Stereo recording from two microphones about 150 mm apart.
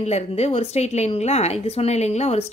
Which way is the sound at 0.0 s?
45° left (ahead or behind).